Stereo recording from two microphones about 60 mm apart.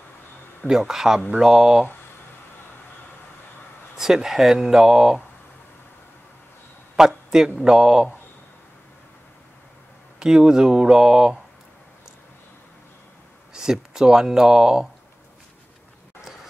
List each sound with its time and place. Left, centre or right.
0.7 s speech: centre
3.9 s speech: centre
7.0 s a man's voice: centre
10.1 s speech: centre
13.5 s speech: centre